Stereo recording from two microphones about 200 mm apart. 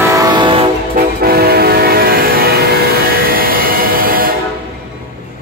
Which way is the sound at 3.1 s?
45° right (ahead or behind).